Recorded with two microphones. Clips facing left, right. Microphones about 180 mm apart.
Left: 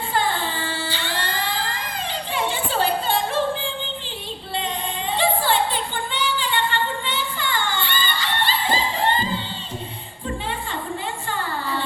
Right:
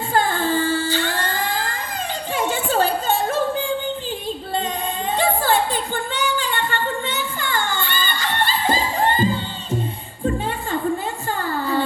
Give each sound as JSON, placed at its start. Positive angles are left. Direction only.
{"t": 0.1, "sound": "singing", "side_deg": -45}
{"t": 2.3, "sound": "music", "side_deg": -45}
{"t": 5.1, "sound": "a sound", "side_deg": -45}